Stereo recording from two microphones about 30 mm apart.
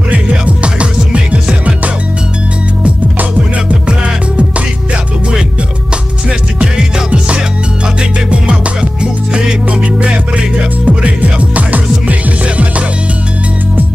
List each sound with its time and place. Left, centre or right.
0.1 s music: right
3.8 s music: right
6.6 s music: right
9.7 s music: right
11.5 s music: right